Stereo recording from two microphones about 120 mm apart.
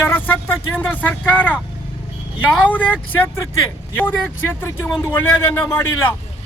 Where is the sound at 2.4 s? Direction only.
15° left (ahead or behind).